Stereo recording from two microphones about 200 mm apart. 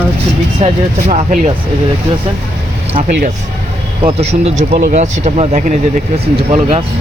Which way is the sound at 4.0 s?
30° right (ahead or behind).